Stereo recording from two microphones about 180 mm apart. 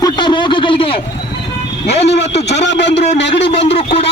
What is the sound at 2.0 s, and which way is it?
Speech, 70° left (ahead or behind).